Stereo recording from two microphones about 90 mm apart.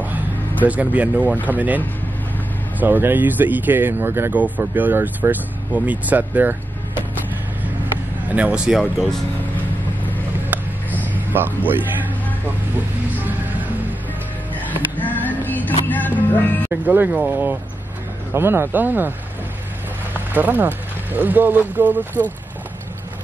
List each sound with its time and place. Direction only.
0.7 s speech: 15° right (ahead or behind)
2.8 s speech: 20° right (ahead or behind)
8.3 s speech: 15° right (ahead or behind)
8.7 s speech: centre (ahead or behind)
10.5 s a sound: 20° right (ahead or behind)
11.3 s speech: 20° right (ahead or behind)
13.1 s music: 20° right (ahead or behind)
14.5 s a sound: 20° left (ahead or behind)
15.9 s music: 20° left (ahead or behind)
16.8 s speech: 20° right (ahead or behind)
20.3 s speech: 20° right (ahead or behind)